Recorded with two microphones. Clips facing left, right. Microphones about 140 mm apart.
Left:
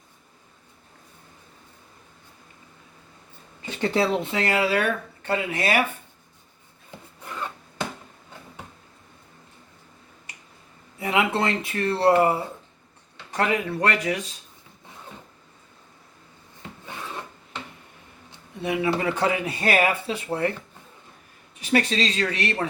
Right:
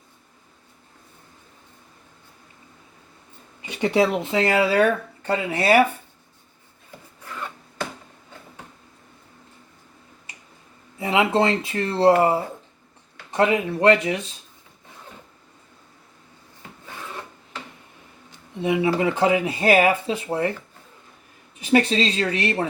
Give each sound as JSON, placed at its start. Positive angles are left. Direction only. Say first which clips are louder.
{"t": 3.6, "sound": "speech", "louder": "right 3 dB", "side_deg": -15}
{"t": 11.0, "sound": "speech", "louder": "right 4 dB", "side_deg": -25}
{"t": 18.6, "sound": "speech", "louder": "right 3 dB", "side_deg": -25}
{"t": 21.6, "sound": "speech", "louder": "right 4 dB", "side_deg": -30}